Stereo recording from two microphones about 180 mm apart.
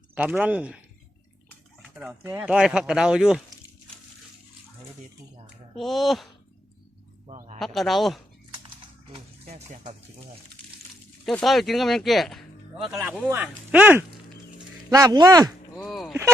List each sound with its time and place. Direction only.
0.1 s speech: 10° right (ahead or behind)
2.0 s speech: 5° right (ahead or behind)
5.7 s speech: centre (ahead or behind)
7.3 s a sound: 40° right (ahead or behind)
7.6 s speech: centre (ahead or behind)
11.3 s speech: centre (ahead or behind)
13.2 s speech: 15° right (ahead or behind)
15.7 s speech: centre (ahead or behind)